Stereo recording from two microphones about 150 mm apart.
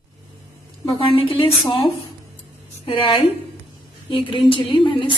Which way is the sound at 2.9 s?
40° left (ahead or behind).